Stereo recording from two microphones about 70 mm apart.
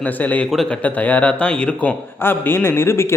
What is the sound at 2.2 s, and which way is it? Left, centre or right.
Speech, left.